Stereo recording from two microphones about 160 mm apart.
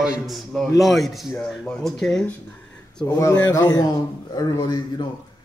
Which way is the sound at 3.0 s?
15° left (ahead or behind).